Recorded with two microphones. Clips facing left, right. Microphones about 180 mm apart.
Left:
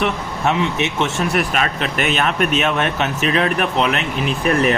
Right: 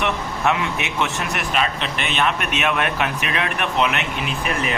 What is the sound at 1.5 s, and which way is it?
Speech, 45° left (ahead or behind).